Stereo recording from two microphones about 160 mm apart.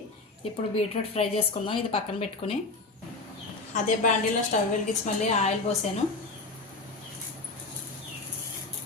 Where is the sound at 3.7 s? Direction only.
50° left (ahead or behind).